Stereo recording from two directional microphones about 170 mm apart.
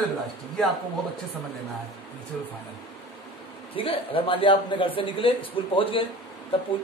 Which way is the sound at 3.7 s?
30° left (ahead or behind).